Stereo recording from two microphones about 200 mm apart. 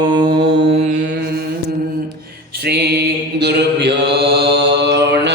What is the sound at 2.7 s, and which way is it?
Mantra, 55° right (ahead or behind).